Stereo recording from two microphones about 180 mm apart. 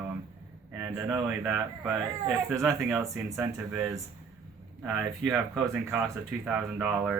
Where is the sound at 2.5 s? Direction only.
15° right (ahead or behind).